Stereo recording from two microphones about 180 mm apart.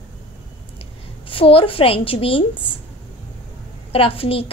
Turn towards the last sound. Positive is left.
turn(degrees=30)  # may be behind; listen again after turning